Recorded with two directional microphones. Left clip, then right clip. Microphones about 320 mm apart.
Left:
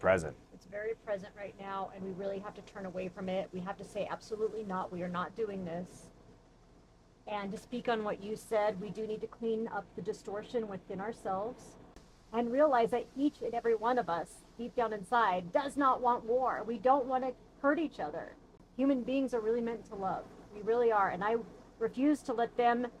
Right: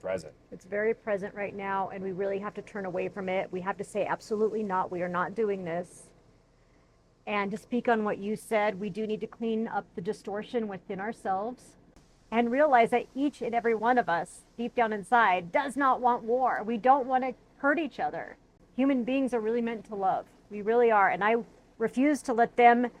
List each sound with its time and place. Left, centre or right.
0.0 s speech: left
0.7 s speech: right
7.3 s a woman's voice: right
8.2 s a woman's voice: right
20.7 s speech: right